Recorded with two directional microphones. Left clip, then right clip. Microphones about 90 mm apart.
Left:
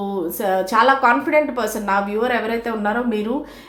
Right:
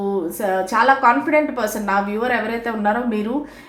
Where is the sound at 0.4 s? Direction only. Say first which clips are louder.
Left 1 dB; 25° left (ahead or behind).